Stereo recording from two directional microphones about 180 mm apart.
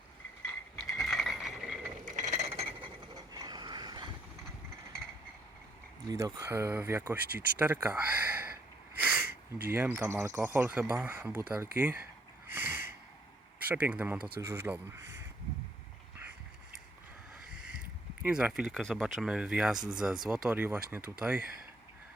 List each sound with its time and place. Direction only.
0.9 s mechanisms: centre (ahead or behind)
2.0 s a sound: 45° right (ahead or behind)
2.5 s frog: 30° right (ahead or behind)
3.3 s boat: 25° right (ahead or behind)
6.1 s speech: 20° right (ahead or behind)
9.0 s a sound: 10° right (ahead or behind)
9.6 s speech: 10° right (ahead or behind)
12.5 s a sound: 10° right (ahead or behind)
13.7 s speech: 10° right (ahead or behind)
18.2 s speech: 5° right (ahead or behind)